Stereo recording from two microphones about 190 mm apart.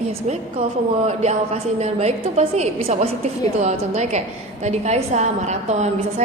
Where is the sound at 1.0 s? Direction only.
35° right (ahead or behind).